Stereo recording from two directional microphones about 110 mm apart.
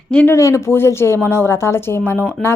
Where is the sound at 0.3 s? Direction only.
25° left (ahead or behind).